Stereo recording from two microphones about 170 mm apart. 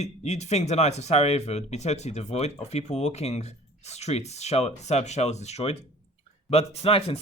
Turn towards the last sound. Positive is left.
turn(degrees=35)  # may be behind; listen again after turning